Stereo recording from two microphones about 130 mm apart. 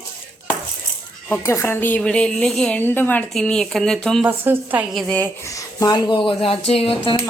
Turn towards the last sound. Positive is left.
turn(degrees=45)  # may be behind; listen again after turning